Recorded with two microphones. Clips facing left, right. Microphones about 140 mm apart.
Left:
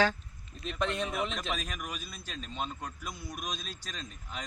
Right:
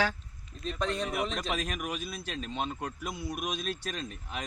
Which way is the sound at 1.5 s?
65° right (ahead or behind).